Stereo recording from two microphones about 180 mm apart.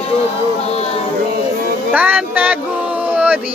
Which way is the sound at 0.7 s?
35° left (ahead or behind).